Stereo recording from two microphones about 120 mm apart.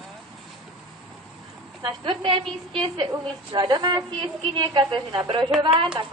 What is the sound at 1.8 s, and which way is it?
A woman's voice, 40° right (ahead or behind).